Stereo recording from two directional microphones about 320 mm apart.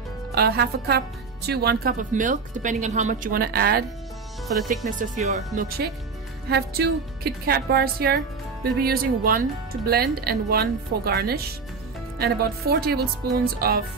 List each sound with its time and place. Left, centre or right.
0.3 s a woman's voice: right